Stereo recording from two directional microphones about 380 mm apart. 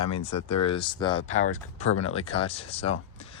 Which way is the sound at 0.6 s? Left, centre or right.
Centre.